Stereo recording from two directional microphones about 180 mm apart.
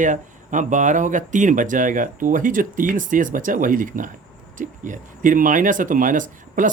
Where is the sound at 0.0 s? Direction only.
45° right (ahead or behind).